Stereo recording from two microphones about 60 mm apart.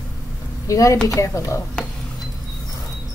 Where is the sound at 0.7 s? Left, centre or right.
Left.